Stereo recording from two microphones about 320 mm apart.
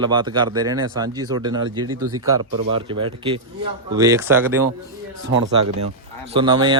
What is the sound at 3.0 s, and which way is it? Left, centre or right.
Speech, centre.